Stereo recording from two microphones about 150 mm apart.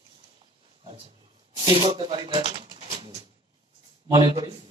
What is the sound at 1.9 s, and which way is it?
Speech, 35° right (ahead or behind).